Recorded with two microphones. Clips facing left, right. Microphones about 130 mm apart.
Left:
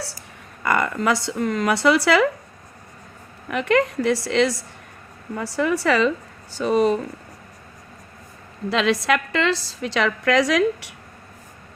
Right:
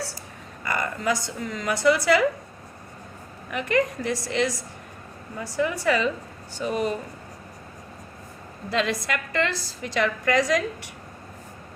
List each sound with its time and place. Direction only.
0.6 s speech: 70° left (ahead or behind); by 2.2 s 85° left
3.5 s a woman's voice: 80° left
8.7 s a woman's voice: 90° left